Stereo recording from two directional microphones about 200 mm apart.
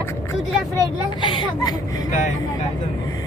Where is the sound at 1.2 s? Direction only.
20° left (ahead or behind).